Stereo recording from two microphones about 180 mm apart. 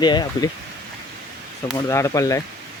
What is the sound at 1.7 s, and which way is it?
Speech, 15° left (ahead or behind).